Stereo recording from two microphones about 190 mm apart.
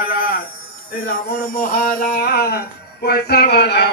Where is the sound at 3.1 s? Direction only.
55° left (ahead or behind).